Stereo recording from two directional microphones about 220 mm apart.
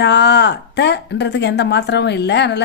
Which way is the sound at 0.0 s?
50° left (ahead or behind).